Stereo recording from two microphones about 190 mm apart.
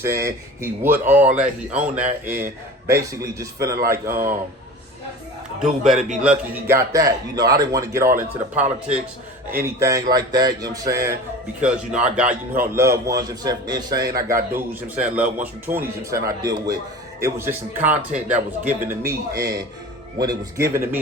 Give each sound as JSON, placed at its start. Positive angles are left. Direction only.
{"t": 0.0, "sound": "a man's voice", "side_deg": -15}
{"t": 5.5, "sound": "a man's voice", "side_deg": 0}
{"t": 9.5, "sound": "speech", "side_deg": -10}
{"t": 11.6, "sound": "a man's voice", "side_deg": -5}